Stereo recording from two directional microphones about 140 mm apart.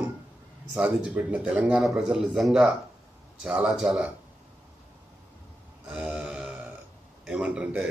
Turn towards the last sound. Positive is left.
turn(degrees=-5)  # may be behind; listen again after turning